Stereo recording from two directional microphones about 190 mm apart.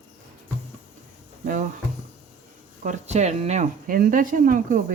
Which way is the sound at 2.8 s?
40° right (ahead or behind).